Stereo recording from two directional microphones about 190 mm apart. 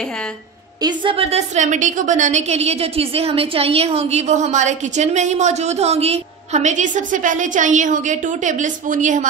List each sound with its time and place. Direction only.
0.8 s a woman's voice: 30° right (ahead or behind)